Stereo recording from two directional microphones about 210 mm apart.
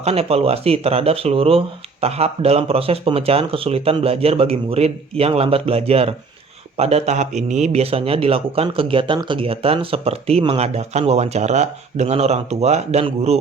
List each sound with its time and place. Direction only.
0.0 s speech: 30° right (ahead or behind)